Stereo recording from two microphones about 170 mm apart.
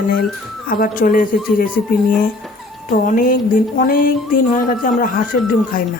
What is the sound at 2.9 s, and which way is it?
Speech, 55° left (ahead or behind).